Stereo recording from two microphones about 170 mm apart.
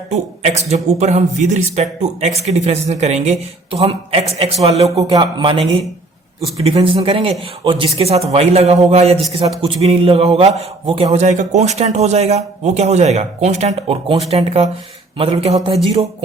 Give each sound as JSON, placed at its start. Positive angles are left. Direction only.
{"t": 0.1, "sound": "speech", "side_deg": -40}
{"t": 4.9, "sound": "speech", "side_deg": -25}